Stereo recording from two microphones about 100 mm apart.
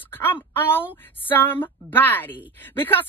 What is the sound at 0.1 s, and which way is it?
Speech, 20° left (ahead or behind).